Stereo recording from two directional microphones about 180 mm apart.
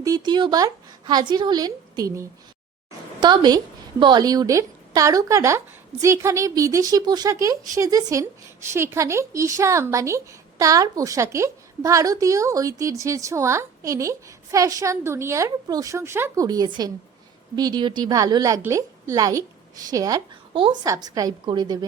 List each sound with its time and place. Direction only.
0.0 s a woman's voice: 20° right (ahead or behind)